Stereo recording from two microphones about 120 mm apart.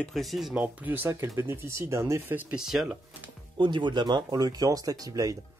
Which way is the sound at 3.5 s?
40° right (ahead or behind).